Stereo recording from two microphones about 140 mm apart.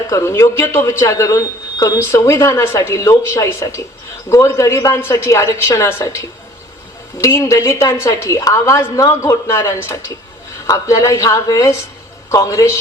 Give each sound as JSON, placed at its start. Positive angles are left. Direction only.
{"t": 0.1, "sound": "a man's voice", "side_deg": 20}